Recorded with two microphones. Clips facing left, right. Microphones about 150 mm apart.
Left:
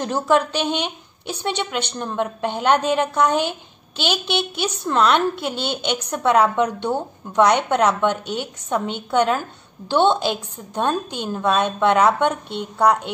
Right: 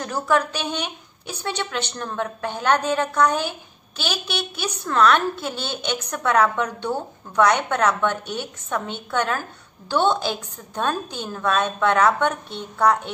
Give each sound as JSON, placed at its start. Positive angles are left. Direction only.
{"t": 0.0, "sound": "a woman's voice", "side_deg": 25}